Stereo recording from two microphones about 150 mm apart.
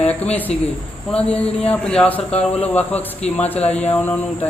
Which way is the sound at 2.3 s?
45° left (ahead or behind).